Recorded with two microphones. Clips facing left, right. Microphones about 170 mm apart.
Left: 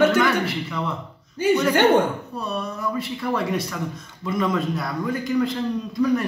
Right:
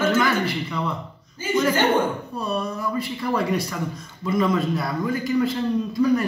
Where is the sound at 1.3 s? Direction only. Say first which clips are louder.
Left 3 dB; 70° left (ahead or behind).